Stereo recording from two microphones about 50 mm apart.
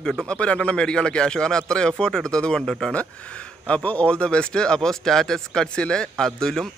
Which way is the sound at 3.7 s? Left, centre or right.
Left.